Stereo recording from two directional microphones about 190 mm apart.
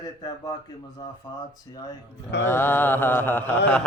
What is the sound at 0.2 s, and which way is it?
Speech, 20° left (ahead or behind).